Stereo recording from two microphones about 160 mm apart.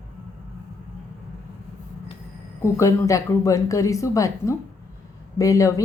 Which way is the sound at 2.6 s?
20° left (ahead or behind).